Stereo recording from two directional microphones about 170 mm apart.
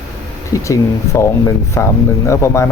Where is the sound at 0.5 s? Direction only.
15° left (ahead or behind).